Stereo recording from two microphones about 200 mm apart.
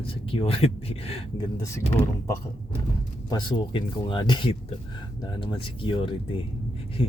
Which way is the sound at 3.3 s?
25° left (ahead or behind).